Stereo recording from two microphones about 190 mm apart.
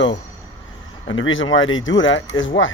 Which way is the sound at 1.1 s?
90° left.